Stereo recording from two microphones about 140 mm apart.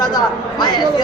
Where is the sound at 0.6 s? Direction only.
30° left (ahead or behind).